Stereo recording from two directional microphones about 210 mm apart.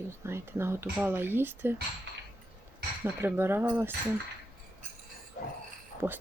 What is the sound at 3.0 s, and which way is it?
Speech, 10° right (ahead or behind).